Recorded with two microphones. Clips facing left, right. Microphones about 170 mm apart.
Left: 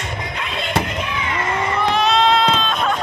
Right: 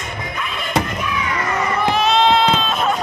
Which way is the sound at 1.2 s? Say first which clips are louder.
Even; 25° left (ahead or behind).